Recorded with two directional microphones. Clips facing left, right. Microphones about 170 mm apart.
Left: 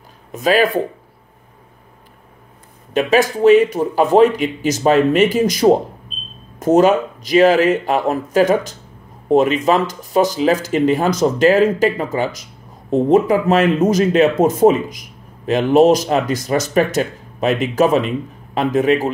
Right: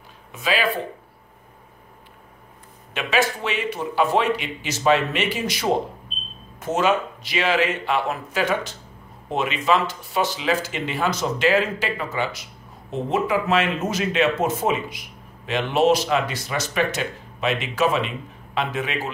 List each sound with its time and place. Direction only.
0.3 s speech: 45° left (ahead or behind)
2.9 s speech: 40° left (ahead or behind)